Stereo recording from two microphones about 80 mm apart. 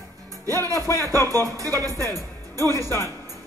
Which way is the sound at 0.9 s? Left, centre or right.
Right.